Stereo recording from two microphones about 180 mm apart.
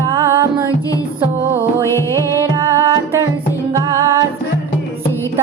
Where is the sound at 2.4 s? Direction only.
15° right (ahead or behind).